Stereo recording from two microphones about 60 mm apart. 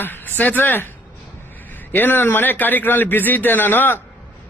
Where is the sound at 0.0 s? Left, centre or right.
Left.